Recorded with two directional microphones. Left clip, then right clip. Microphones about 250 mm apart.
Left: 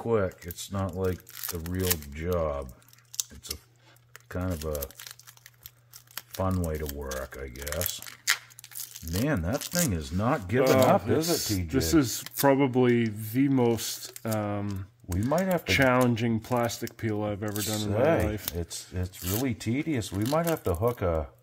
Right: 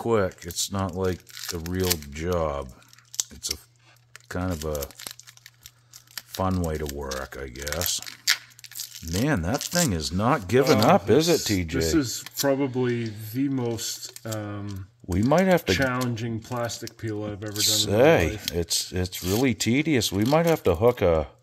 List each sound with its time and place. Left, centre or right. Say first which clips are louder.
0.0 s speech: right 3 dB; right
1.3 s speech: right 4 dB; centre
2.1 s speech: right 1 dB; right
4.3 s speech: right 4 dB; right
6.4 s speech: right 4 dB; right
7.5 s speech: right 4 dB; centre
8.0 s a sound: right 3 dB; centre
9.2 s speech: right 3 dB; right
11.7 s speech: left 2 dB; left
15.1 s speech: right 7 dB; right
15.7 s speech: left 2 dB; left
17.8 s speech: right 5 dB; right